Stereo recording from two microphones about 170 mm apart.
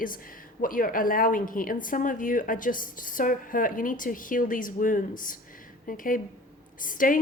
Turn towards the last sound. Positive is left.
turn(degrees=55)  # may be behind; listen again after turning